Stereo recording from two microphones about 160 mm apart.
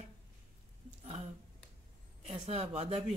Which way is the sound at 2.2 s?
35° right (ahead or behind).